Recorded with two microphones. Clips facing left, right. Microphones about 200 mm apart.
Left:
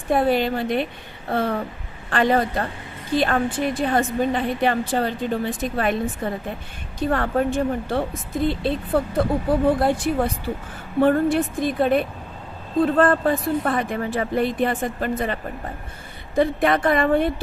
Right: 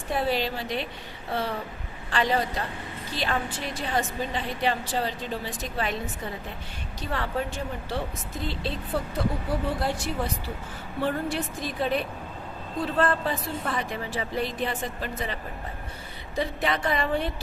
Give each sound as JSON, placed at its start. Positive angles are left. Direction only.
{"t": 0.1, "sound": "a woman's voice", "side_deg": 50}